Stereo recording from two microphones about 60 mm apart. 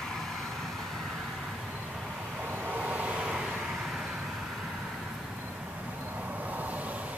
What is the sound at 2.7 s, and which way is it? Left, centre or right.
Vehicle, centre.